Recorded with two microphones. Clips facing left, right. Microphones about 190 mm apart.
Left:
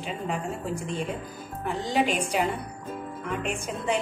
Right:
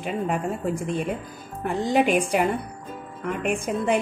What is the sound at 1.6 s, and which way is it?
A woman's voice, 55° right (ahead or behind).